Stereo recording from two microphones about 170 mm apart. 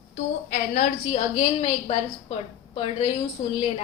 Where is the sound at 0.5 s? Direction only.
50° left (ahead or behind); by 3.5 s 30° left (ahead or behind).